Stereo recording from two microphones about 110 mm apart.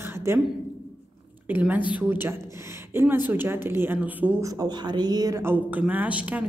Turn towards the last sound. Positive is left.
turn(degrees=-15)  # may be behind; listen again after turning